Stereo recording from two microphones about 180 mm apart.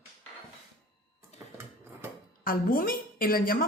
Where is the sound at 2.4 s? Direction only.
55° left (ahead or behind).